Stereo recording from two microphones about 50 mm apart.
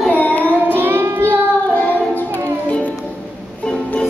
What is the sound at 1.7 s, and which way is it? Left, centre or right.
Music, left.